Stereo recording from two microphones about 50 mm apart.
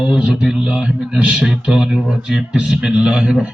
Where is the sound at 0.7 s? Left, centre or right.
Right.